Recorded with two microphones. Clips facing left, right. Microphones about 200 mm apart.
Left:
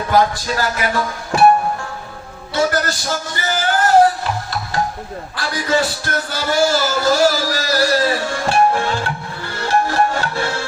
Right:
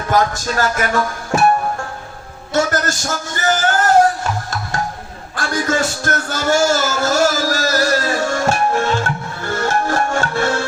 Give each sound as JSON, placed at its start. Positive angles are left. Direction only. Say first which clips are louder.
{"t": 0.1, "sound": "music", "louder": "even", "side_deg": -45}
{"t": 2.5, "sound": "music", "louder": "right 1 dB", "side_deg": -45}
{"t": 5.4, "sound": "music", "louder": "even", "side_deg": -50}